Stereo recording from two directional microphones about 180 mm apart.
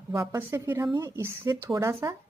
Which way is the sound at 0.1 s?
15° right (ahead or behind).